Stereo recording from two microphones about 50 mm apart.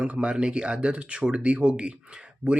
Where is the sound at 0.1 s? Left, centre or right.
Right.